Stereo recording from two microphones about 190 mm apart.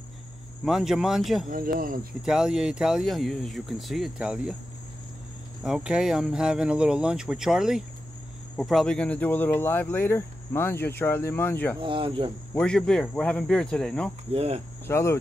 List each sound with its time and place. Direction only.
0.7 s speech: centre (ahead or behind)
1.5 s speech: 50° right (ahead or behind)
2.2 s speech: 5° right (ahead or behind)
5.6 s speech: 5° right (ahead or behind)
11.8 s speech: 25° right (ahead or behind)
12.5 s speech: 5° left (ahead or behind)
14.3 s cricket: 30° right (ahead or behind)
14.9 s speech: 15° left (ahead or behind)